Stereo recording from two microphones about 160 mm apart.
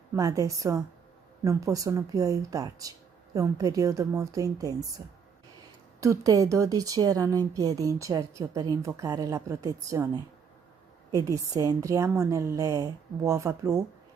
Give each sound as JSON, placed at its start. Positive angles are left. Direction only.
{"t": 0.1, "sound": "a woman's voice", "side_deg": -20}